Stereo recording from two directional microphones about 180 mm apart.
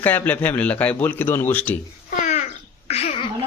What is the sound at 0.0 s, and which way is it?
Speech, 10° left (ahead or behind).